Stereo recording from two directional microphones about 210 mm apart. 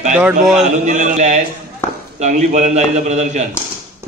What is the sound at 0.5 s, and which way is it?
A man's voice, 35° right (ahead or behind).